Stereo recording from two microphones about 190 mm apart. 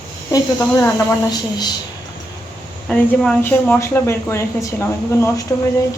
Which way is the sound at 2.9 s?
5° left (ahead or behind).